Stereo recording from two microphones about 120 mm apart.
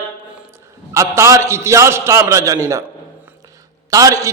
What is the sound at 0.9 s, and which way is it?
A man's voice, 25° right (ahead or behind).